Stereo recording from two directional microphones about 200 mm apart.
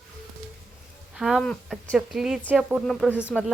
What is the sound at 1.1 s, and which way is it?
A woman's voice, centre (ahead or behind).